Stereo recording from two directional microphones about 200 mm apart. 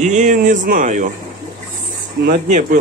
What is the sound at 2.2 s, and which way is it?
Speech, 45° right (ahead or behind).